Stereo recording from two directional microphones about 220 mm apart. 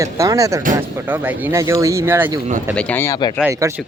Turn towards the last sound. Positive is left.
turn(degrees=-10)  # may be behind; listen again after turning